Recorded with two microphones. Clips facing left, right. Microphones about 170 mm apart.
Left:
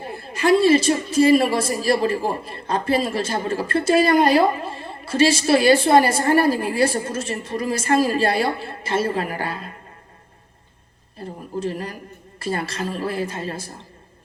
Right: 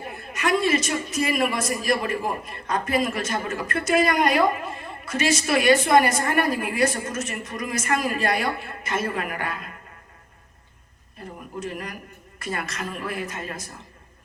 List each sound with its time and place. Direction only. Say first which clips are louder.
0.0 s a man's voice: left 5 dB; 30° left (ahead or behind)
11.2 s a man's voice: left 6 dB; 30° left (ahead or behind)